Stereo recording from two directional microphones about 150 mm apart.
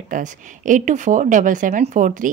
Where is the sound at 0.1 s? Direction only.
60° right (ahead or behind).